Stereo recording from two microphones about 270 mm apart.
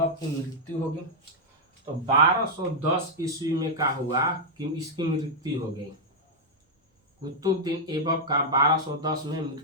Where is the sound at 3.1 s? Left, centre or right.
Centre.